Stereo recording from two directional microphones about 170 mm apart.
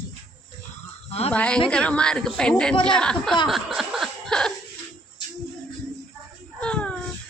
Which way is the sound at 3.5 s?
Centre (ahead or behind).